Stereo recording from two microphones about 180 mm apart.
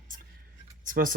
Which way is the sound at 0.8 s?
50° right (ahead or behind).